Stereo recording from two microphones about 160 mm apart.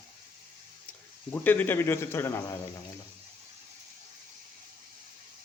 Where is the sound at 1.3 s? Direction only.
10° left (ahead or behind).